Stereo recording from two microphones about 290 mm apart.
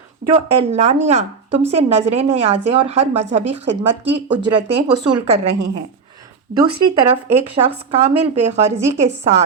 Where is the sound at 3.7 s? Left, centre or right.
Right.